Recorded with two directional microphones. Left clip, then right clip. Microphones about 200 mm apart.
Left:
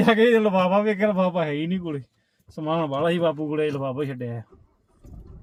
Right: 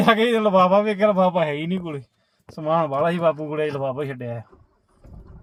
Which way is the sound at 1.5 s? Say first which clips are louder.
Right 1 dB; 45° right (ahead or behind).